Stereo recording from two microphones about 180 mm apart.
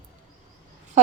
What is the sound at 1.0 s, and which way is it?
Speech, 40° right (ahead or behind).